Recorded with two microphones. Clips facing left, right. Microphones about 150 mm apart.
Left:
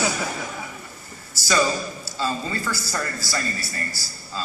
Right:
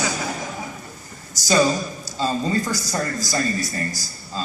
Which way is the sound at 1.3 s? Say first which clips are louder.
Right 4 dB; 15° right (ahead or behind).